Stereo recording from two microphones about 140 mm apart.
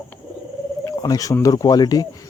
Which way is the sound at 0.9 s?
25° left (ahead or behind).